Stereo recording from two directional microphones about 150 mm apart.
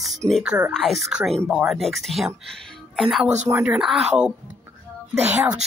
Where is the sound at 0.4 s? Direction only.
10° right (ahead or behind).